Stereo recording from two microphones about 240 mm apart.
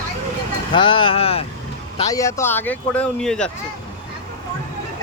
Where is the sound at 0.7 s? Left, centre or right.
Left; by 3.5 s centre.